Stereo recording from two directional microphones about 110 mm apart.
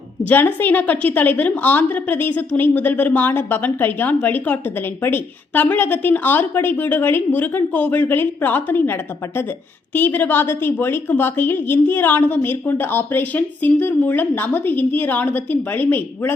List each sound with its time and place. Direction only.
0.3 s a woman's voice: 15° left (ahead or behind)